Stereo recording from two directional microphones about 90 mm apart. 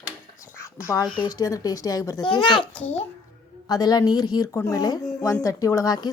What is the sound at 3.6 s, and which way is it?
A woman's voice, 45° left (ahead or behind).